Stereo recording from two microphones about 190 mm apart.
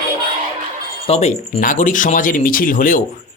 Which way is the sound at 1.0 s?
35° left (ahead or behind).